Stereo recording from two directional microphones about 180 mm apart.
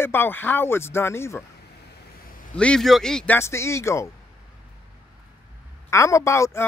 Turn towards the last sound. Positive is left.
turn(degrees=15)  # may be behind; listen again after turning